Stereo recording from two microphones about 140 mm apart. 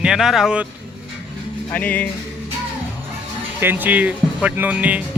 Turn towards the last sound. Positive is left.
turn(degrees=-10)  # may be behind; listen again after turning